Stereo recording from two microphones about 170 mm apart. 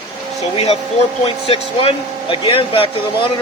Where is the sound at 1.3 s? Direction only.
35° left (ahead or behind).